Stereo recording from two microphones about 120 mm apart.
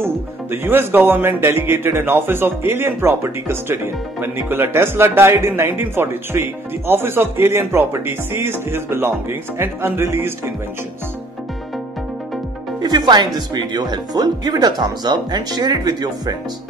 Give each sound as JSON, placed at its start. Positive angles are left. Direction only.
{"t": 0.0, "sound": "speech", "side_deg": -20}
{"t": 12.8, "sound": "speech", "side_deg": -35}